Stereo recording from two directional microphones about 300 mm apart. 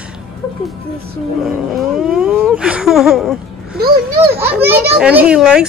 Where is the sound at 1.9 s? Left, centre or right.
Centre.